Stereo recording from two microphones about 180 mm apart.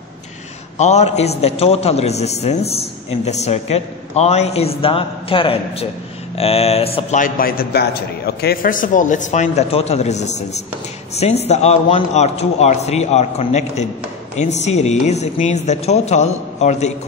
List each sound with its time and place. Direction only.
0.7 s a man's voice: 40° left (ahead or behind)
7.2 s a man's voice: 50° left (ahead or behind)